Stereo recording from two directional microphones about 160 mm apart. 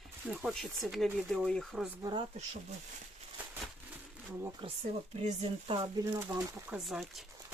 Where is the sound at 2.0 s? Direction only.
25° right (ahead or behind).